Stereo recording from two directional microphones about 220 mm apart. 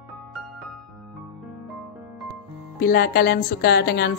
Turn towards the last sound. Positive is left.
turn(degrees=45)  # may be behind; listen again after turning